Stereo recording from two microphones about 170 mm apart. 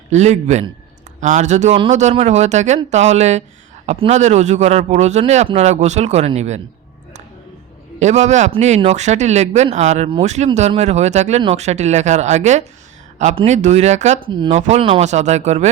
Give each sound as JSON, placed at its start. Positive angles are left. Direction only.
{"t": 0.1, "sound": "a man's voice", "side_deg": -40}
{"t": 7.9, "sound": "a man's voice", "side_deg": -45}